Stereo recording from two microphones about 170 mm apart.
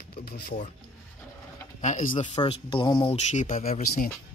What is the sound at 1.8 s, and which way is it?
Speech, 50° left (ahead or behind).